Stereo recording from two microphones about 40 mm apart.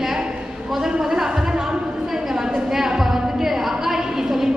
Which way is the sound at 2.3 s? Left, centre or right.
Centre.